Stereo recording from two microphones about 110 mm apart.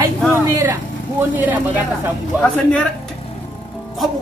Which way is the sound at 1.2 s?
15° right (ahead or behind).